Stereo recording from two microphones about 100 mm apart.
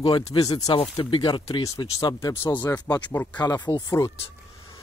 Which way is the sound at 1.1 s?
50° left (ahead or behind).